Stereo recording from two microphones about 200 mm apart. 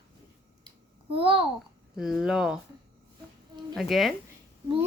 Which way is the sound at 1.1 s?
25° right (ahead or behind).